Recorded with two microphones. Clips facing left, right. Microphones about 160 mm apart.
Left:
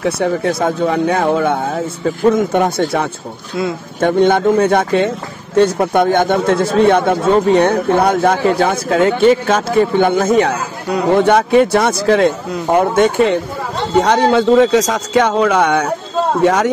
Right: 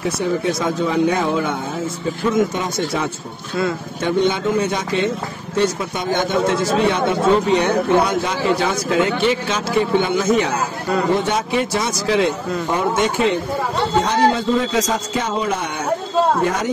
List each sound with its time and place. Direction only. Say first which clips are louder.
0.0 s speech: left 4 dB; 60° left (ahead or behind)
4.0 s speech: left 7 dB; 55° left (ahead or behind)
14.0 s speech: left 5 dB; 70° left (ahead or behind)